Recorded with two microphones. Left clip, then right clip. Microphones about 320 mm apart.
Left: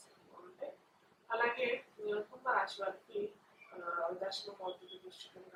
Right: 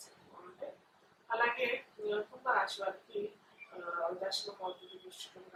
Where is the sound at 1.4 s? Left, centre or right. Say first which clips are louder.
Right 2 dB; centre.